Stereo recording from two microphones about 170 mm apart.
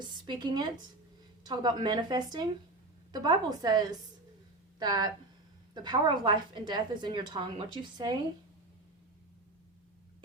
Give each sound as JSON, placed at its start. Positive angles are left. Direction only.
{"t": 0.0, "sound": "a woman's voice", "side_deg": -25}